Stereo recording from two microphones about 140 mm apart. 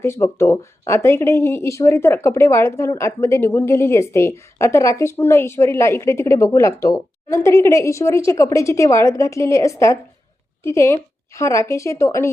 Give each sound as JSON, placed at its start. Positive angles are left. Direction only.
{"t": 0.0, "sound": "speech", "side_deg": 20}